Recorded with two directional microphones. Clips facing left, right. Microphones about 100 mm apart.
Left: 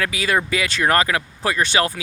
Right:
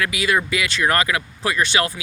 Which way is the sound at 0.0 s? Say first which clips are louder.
Even; 35° left (ahead or behind).